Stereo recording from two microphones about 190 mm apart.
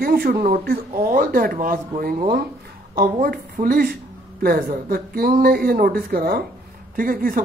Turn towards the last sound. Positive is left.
turn(degrees=-50)  # may be behind; listen again after turning